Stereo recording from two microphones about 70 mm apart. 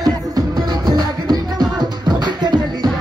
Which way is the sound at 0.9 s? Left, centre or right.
Right.